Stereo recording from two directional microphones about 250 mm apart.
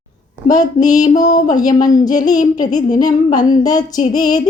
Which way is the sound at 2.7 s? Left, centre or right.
Centre.